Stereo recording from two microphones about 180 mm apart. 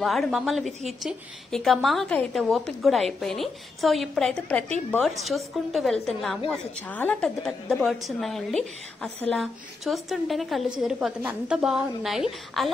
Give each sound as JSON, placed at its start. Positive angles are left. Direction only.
{"t": 0.0, "sound": "a woman's voice", "side_deg": 0}